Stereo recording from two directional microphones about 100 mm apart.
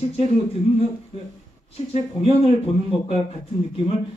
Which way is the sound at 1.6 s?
85° left.